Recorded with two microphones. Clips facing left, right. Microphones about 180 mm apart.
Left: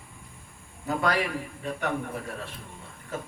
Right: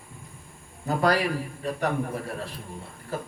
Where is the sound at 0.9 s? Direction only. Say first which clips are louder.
Right 3 dB; 35° right (ahead or behind).